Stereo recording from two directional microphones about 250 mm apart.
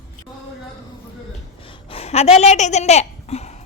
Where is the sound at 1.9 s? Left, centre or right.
Left.